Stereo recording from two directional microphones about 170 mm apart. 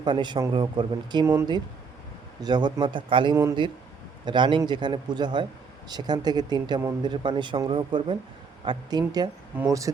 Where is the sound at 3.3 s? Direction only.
15° right (ahead or behind).